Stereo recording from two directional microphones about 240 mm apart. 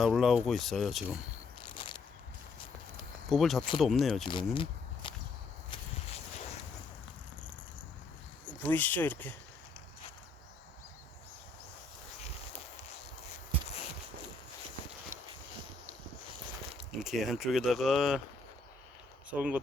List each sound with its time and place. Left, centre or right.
0.0 s speech: centre
1.6 s a sound: centre
3.2 s speech: centre
4.3 s a sound: left
8.4 s speech: centre
17.0 s speech: centre
19.3 s speech: centre